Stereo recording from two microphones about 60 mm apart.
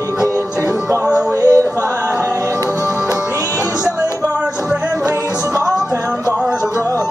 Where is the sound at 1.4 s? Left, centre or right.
Right.